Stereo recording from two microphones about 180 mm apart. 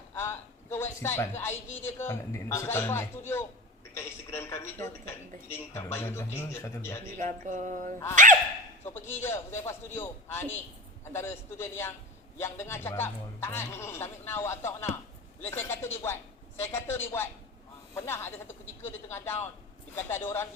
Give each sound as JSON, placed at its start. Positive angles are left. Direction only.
{"t": 0.1, "sound": "a man's voice", "side_deg": 15}
{"t": 7.2, "sound": "a sound", "side_deg": -45}
{"t": 8.8, "sound": "speech", "side_deg": 15}